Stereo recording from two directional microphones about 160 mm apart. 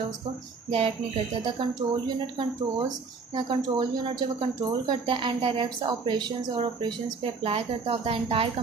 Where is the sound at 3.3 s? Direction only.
30° right (ahead or behind).